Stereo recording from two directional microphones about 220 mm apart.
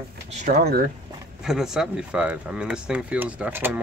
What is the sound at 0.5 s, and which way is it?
Speech, 45° right (ahead or behind).